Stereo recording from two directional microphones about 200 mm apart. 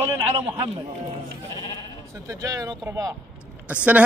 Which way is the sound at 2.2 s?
15° right (ahead or behind).